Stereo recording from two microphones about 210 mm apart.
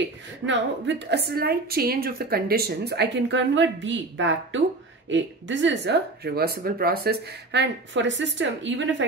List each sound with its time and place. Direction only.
0.5 s a woman's voice: 55° right (ahead or behind)